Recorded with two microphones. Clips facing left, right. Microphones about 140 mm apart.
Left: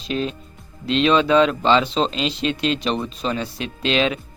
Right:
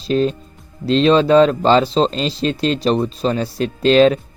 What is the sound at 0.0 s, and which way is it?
Speech, 40° right (ahead or behind).